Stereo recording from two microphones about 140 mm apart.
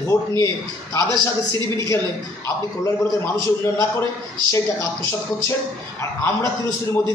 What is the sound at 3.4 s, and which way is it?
A man's voice, 20° left (ahead or behind).